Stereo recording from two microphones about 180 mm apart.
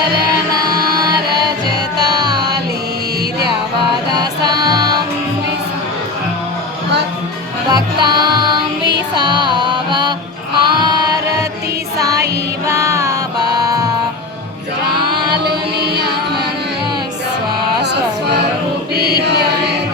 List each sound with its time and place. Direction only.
0.7 s music: 25° right (ahead or behind)
4.1 s music: 20° right (ahead or behind)
7.7 s music: 25° right (ahead or behind)
14.9 s mantra: 25° right (ahead or behind)
19.1 s mantra: 70° right (ahead or behind)